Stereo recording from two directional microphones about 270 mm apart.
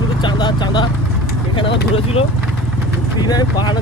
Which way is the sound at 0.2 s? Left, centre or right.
Centre.